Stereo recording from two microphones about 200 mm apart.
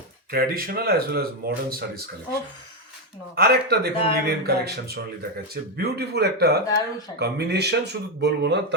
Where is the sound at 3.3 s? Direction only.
50° right (ahead or behind).